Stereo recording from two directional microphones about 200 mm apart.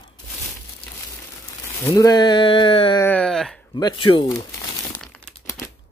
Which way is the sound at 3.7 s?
25° left (ahead or behind).